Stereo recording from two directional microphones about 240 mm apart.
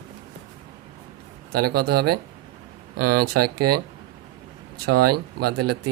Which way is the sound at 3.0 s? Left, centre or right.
Right.